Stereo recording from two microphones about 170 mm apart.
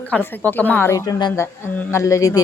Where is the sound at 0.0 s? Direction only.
10° left (ahead or behind).